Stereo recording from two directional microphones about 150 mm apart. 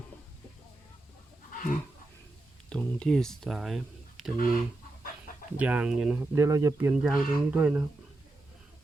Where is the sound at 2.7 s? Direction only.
5° left (ahead or behind).